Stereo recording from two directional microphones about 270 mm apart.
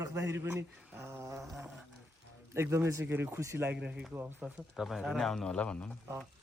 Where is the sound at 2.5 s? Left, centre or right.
Centre.